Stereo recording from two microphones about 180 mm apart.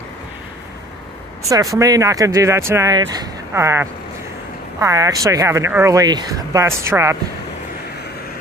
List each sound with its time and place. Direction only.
1.5 s speech: 20° right (ahead or behind)